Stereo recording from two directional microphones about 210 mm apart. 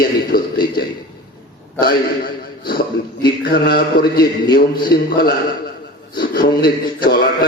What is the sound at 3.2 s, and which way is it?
A man's voice, 50° left (ahead or behind).